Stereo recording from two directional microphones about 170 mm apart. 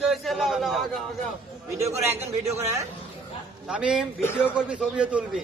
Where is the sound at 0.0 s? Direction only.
Centre (ahead or behind).